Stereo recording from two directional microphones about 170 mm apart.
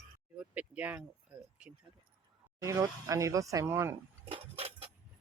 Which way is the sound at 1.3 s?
5° right (ahead or behind).